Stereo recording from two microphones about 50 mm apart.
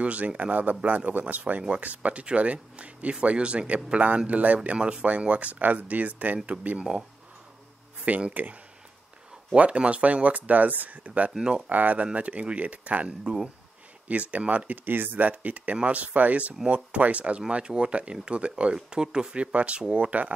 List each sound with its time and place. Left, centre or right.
0.0 s speech: right
8.0 s speech: right
9.5 s speech: right
11.3 s speech: centre
11.7 s speech: right
14.3 s speech: right
14.9 s speech: right